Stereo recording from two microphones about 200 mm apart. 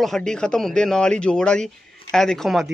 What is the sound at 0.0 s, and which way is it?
Speech, centre (ahead or behind).